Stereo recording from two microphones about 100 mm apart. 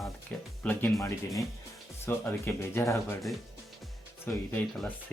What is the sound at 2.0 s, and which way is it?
Speech, 25° left (ahead or behind).